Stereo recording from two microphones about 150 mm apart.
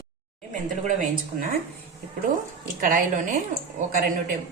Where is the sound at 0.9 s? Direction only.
65° right (ahead or behind).